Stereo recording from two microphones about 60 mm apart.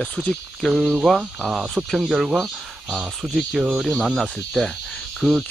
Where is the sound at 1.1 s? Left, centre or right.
Centre.